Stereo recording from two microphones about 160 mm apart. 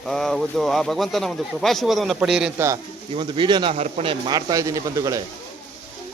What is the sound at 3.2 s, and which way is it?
Speech, 30° right (ahead or behind).